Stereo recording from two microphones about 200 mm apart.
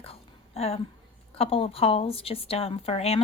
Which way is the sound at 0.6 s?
30° left (ahead or behind).